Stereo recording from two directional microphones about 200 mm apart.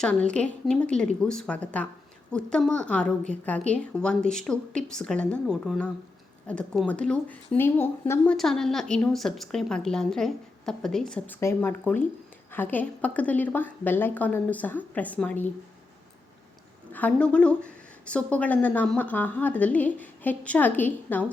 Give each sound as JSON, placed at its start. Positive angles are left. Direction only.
{"t": 0.0, "sound": "a woman's voice", "side_deg": 5}
{"t": 16.9, "sound": "speech", "side_deg": 5}